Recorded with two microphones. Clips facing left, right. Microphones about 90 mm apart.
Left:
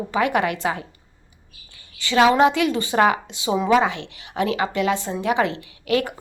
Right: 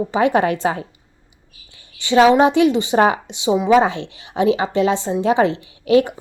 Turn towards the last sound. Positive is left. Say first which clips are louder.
# right 7 dB
turn(degrees=-25)  # may be behind; listen again after turning